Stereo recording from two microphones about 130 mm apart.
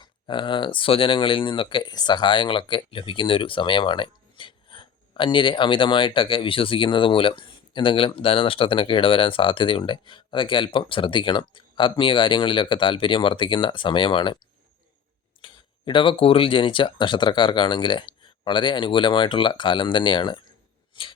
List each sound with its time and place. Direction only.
0.0 s speech: 40° left (ahead or behind)
15.4 s speech: 40° left (ahead or behind)